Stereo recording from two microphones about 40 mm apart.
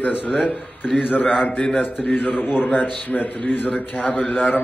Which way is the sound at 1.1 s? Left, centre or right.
Left.